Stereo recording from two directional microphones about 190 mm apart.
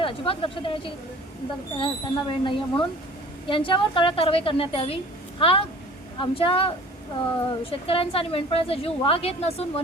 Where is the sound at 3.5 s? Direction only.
25° left (ahead or behind).